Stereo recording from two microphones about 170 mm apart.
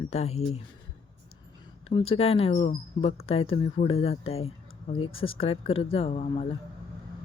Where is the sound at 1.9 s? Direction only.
35° left (ahead or behind).